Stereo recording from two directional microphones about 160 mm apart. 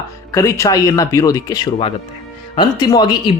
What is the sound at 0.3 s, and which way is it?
Speech, 15° left (ahead or behind).